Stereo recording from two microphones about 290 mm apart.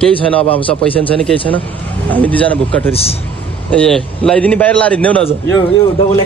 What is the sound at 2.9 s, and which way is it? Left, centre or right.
Speech, left.